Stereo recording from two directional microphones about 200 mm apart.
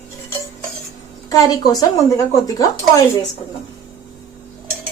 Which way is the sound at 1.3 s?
20° left (ahead or behind).